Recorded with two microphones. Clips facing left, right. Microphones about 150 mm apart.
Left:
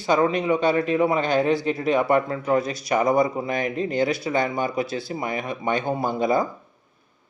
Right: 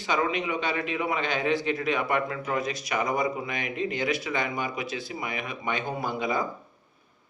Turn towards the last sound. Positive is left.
turn(degrees=35)  # may be behind; listen again after turning